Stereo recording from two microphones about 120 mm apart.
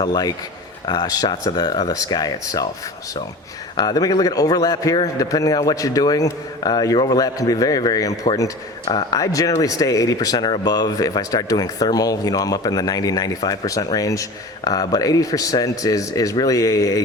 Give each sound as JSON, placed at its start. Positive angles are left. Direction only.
{"t": 0.0, "sound": "speech", "side_deg": 35}
{"t": 3.8, "sound": "a man's voice", "side_deg": 35}